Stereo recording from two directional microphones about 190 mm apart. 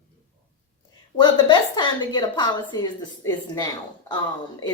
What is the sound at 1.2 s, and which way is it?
A woman's voice, 25° left (ahead or behind).